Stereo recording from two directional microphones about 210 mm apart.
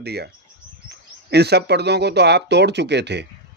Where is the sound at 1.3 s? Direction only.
50° right (ahead or behind).